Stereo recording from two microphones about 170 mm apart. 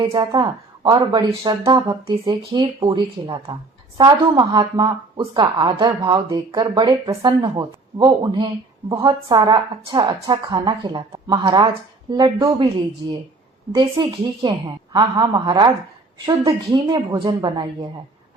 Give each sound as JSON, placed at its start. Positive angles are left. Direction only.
{"t": 0.0, "sound": "speech", "side_deg": -20}
{"t": 14.0, "sound": "speech", "side_deg": -25}